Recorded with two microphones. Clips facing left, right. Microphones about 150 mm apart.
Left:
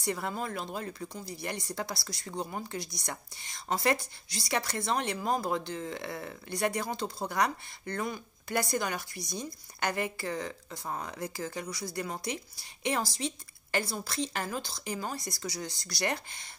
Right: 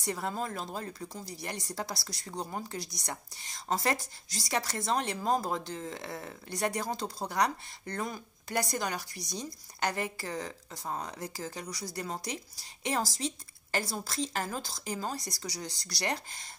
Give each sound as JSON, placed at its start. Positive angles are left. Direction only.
{"t": 0.0, "sound": "a woman's voice", "side_deg": -35}